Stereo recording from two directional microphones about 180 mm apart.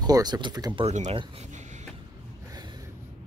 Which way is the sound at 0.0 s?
20° right (ahead or behind).